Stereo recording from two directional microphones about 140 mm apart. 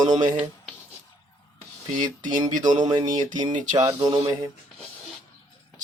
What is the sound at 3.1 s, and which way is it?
Speech, 65° right (ahead or behind).